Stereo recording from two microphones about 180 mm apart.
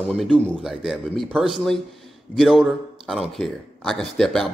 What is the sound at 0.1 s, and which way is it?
A man's voice, 5° left (ahead or behind).